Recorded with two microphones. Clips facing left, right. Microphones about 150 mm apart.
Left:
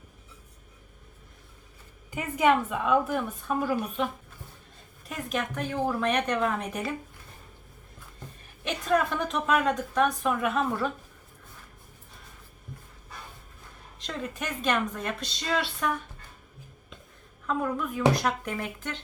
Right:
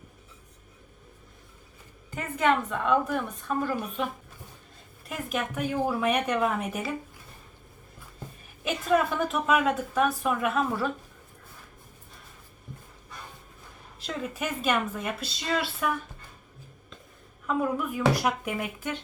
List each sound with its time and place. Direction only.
2.0 s a woman's voice: 10° left (ahead or behind); by 6.9 s 5° right (ahead or behind)
8.6 s a woman's voice: 5° right (ahead or behind)
14.0 s a woman's voice: 5° right (ahead or behind)
17.4 s a woman's voice: 10° right (ahead or behind)